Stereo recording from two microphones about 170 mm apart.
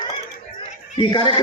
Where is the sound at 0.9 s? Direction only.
30° left (ahead or behind).